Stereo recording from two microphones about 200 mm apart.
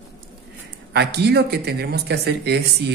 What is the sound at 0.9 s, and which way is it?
Speech, 55° right (ahead or behind).